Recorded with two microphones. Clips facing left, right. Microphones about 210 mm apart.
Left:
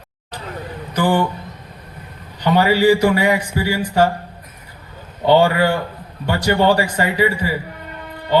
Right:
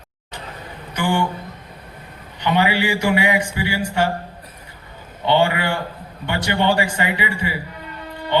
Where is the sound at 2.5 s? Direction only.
40° left (ahead or behind).